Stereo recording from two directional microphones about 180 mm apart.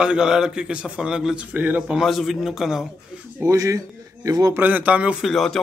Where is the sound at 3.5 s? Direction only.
15° right (ahead or behind).